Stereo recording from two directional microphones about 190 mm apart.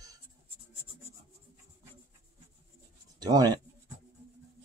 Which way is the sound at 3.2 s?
20° right (ahead or behind).